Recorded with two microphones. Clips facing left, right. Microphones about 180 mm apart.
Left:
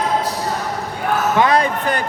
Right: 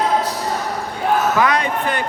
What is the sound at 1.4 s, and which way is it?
Speech, 30° left (ahead or behind).